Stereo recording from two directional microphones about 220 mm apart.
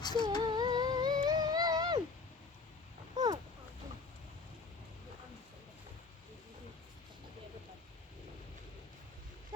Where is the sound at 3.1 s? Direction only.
15° right (ahead or behind).